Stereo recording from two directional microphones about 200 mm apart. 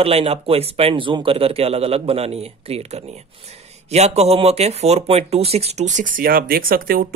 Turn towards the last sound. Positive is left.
turn(degrees=-45)  # may be behind; listen again after turning